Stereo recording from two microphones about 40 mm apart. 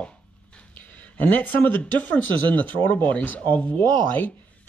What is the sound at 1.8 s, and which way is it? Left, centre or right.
Speech, left.